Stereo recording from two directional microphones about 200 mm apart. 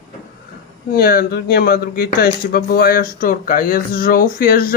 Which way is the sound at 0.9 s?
50° left (ahead or behind).